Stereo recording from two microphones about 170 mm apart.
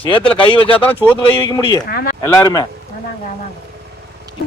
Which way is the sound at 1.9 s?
65° left (ahead or behind).